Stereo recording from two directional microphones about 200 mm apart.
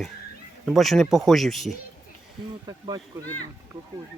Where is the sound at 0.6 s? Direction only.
Centre (ahead or behind).